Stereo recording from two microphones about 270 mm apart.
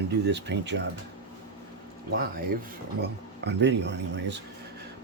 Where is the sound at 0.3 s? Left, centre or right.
Right.